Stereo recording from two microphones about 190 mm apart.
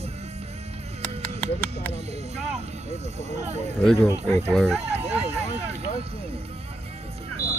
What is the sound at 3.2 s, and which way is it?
Speech, 35° right (ahead or behind).